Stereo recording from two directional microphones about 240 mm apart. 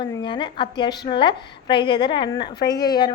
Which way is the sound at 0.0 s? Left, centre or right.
Centre.